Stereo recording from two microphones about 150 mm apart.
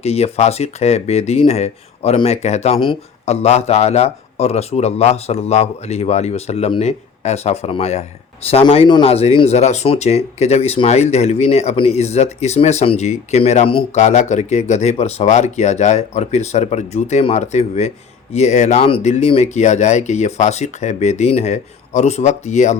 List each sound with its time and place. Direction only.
0.0 s speech: 45° left (ahead or behind)
18.8 s speech: 35° left (ahead or behind)